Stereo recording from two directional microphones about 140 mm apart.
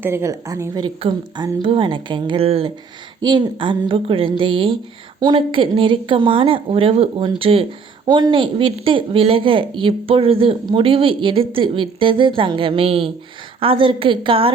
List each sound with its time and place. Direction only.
0.0 s a woman's voice: 20° right (ahead or behind)
1.0 s a woman's voice: 35° right (ahead or behind)
3.2 s a woman's voice: 30° right (ahead or behind)